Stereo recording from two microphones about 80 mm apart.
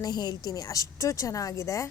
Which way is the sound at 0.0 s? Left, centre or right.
Left.